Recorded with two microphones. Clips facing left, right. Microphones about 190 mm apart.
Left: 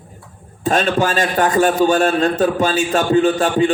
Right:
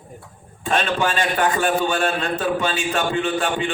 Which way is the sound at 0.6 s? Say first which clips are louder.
Left 5 dB; 40° left (ahead or behind).